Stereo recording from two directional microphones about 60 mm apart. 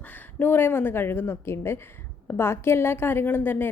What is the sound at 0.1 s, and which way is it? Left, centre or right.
A woman's voice, left.